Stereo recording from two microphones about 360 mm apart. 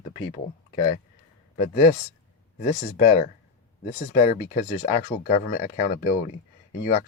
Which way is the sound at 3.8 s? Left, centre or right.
Centre.